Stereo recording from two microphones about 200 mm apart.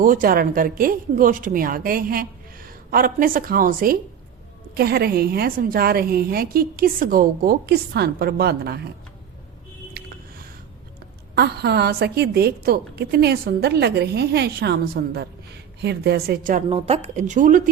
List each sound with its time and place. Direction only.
0.0 s a woman's voice: 40° right (ahead or behind)
10.0 s squish: 50° right (ahead or behind)
11.3 s a woman's voice: 50° right (ahead or behind)
16.6 s speech: 30° right (ahead or behind)